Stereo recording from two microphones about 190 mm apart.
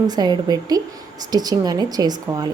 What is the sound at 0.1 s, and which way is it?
Speech, 20° right (ahead or behind).